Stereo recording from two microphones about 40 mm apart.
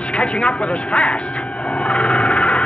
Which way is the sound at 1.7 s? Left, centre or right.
Left.